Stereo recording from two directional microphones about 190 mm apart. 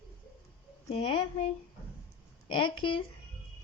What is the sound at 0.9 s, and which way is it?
Speech, 25° left (ahead or behind).